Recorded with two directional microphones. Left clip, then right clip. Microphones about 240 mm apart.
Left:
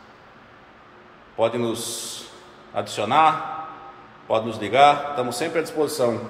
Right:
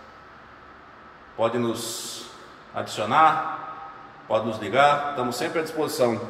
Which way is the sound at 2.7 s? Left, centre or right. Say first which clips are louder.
Left 1 dB; centre.